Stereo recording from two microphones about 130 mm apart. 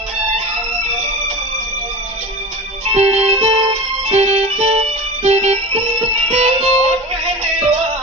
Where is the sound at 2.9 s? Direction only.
55° right (ahead or behind).